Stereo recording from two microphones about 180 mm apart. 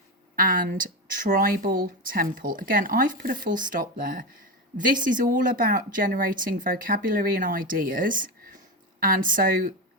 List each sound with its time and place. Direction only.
0.3 s speech: 50° right (ahead or behind)